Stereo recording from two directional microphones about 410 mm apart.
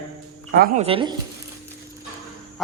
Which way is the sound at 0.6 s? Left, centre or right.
Centre.